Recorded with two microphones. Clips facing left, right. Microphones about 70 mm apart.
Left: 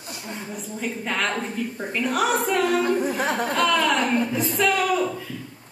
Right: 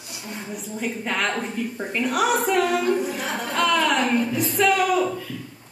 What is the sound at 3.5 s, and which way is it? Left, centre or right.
A man's voice, centre.